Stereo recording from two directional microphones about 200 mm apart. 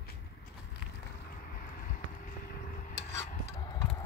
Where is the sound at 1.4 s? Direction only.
45° left (ahead or behind).